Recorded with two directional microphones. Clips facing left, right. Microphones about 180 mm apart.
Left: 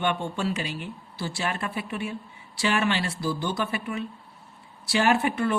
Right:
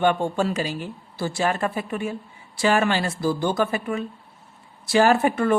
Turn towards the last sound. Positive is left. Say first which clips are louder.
# right 4 dB
turn(degrees=-50)  # may be behind; listen again after turning